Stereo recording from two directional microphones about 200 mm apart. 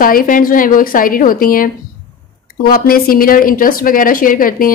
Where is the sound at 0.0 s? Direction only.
45° left (ahead or behind).